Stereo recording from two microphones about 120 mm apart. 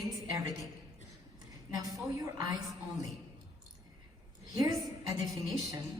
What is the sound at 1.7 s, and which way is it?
Speech, 30° right (ahead or behind).